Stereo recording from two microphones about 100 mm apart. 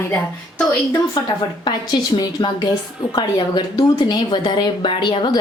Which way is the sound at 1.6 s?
50° left (ahead or behind).